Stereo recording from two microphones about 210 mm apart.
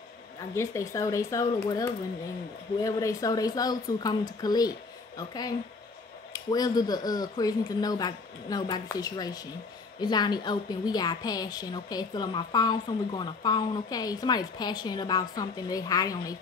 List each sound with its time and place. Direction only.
0.6 s a woman's voice: 15° left (ahead or behind)